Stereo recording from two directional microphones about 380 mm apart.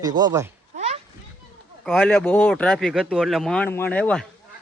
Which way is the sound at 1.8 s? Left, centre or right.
Centre.